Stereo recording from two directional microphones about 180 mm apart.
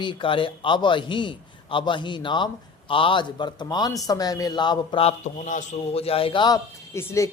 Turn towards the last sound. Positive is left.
turn(degrees=15)  # may be behind; listen again after turning